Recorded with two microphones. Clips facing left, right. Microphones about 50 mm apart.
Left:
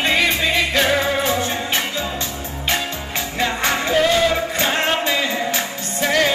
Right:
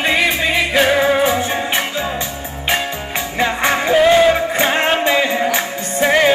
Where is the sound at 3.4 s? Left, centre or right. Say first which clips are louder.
Right 4 dB; centre.